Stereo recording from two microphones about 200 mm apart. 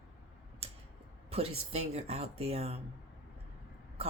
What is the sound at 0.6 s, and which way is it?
Tick-tock, 30° right (ahead or behind).